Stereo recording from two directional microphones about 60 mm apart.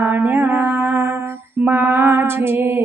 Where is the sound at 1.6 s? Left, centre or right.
Right.